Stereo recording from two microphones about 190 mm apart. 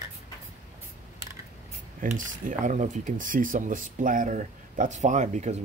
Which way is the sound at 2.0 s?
45° right (ahead or behind).